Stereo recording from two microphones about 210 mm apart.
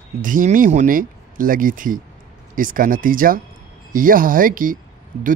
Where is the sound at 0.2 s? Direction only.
40° right (ahead or behind).